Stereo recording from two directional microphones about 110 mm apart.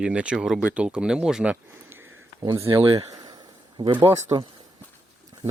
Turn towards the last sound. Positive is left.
turn(degrees=-40)  # may be behind; listen again after turning